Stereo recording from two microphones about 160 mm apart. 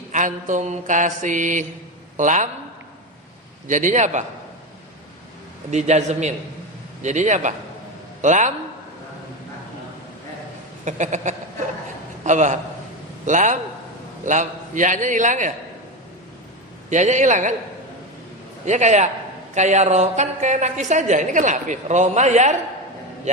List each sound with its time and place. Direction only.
0.1 s a woman's voice: 55° right (ahead or behind)
3.7 s a woman's voice: 50° right (ahead or behind)
5.7 s a woman's voice: 45° right (ahead or behind)
10.8 s a woman's voice: 50° right (ahead or behind)
16.9 s a woman's voice: 50° right (ahead or behind)
18.6 s a woman's voice: 45° right (ahead or behind)